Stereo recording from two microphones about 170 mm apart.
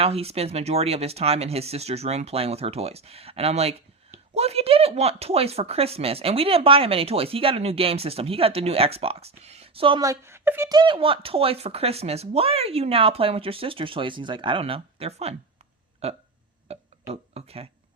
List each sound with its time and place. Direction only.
0.0 s speech: 35° right (ahead or behind)
10.0 s speech: 15° right (ahead or behind)
10.7 s speech: 25° right (ahead or behind)
16.6 s a sound: 35° right (ahead or behind)